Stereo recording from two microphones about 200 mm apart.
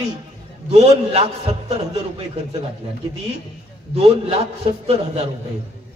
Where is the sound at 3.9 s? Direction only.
30° right (ahead or behind).